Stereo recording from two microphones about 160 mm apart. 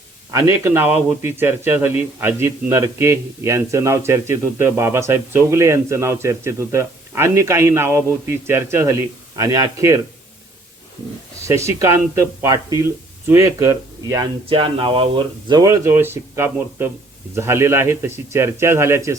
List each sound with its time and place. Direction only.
0.3 s speech: 15° right (ahead or behind)
11.4 s speech: 20° right (ahead or behind)
14.5 s speech: 35° right (ahead or behind); by 19.1 s 15° right (ahead or behind)